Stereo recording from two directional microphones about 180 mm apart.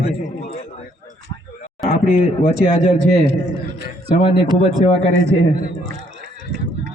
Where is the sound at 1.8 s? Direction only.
45° left (ahead or behind).